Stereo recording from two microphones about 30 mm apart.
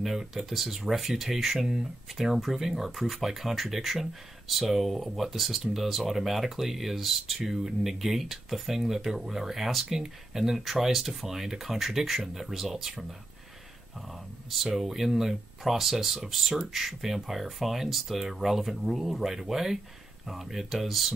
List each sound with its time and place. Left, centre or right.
0.0 s speech: centre
9.8 s speech: centre
10.9 s speech: centre
14.5 s speech: centre
19.2 s speech: centre